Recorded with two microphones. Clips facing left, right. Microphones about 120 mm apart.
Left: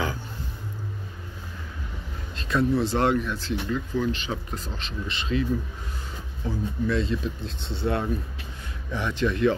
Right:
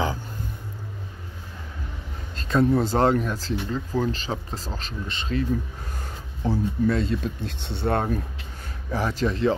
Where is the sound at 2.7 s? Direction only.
40° right (ahead or behind).